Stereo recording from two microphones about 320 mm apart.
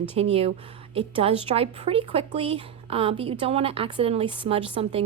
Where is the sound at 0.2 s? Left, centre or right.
Centre.